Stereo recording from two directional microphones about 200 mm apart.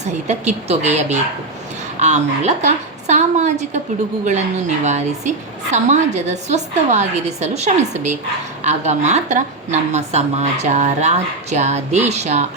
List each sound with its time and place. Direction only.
0.0 s a woman's voice: 35° right (ahead or behind)